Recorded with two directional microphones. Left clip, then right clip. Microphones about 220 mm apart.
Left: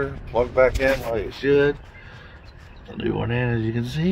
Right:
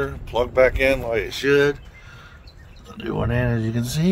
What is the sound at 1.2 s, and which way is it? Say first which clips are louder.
Speech: right 1 dB; 30° right (ahead or behind).